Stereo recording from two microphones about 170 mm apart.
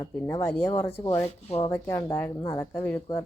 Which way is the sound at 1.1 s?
35° left (ahead or behind).